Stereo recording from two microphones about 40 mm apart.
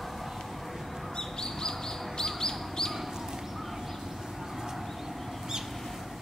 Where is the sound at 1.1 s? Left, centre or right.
Centre.